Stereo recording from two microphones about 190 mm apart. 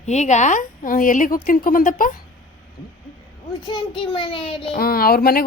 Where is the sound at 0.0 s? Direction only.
35° left (ahead or behind).